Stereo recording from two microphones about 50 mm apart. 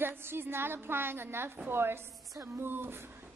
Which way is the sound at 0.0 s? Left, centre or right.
Right.